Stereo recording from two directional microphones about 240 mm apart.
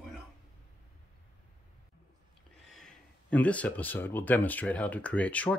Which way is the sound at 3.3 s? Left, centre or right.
Centre.